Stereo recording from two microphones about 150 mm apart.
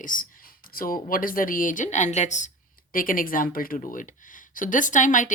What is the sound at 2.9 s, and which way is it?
Speech, 70° left (ahead or behind).